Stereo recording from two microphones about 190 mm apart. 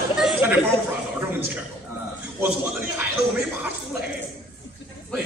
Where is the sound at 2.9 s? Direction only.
5° right (ahead or behind).